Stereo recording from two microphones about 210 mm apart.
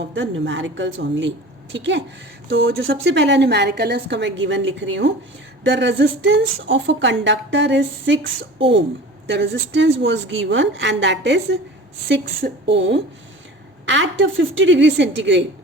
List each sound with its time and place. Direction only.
0.0 s a woman's voice: 65° right (ahead or behind)